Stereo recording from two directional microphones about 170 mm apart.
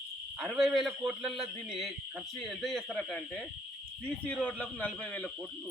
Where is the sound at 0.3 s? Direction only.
5° right (ahead or behind).